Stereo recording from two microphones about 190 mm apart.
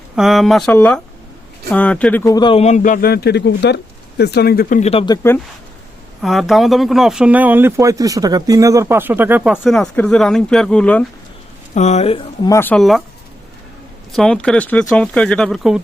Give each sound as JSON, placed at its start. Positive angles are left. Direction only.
{"t": 0.2, "sound": "speech", "side_deg": 0}
{"t": 2.3, "sound": "a man's voice", "side_deg": 25}
{"t": 6.2, "sound": "speech", "side_deg": 0}
{"t": 11.7, "sound": "speech", "side_deg": 35}
{"t": 12.5, "sound": "speech", "side_deg": 10}
{"t": 14.1, "sound": "speech", "side_deg": 5}